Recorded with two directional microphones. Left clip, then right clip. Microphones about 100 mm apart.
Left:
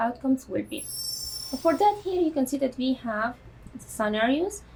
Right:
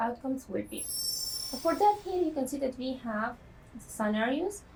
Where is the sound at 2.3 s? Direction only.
35° right (ahead or behind).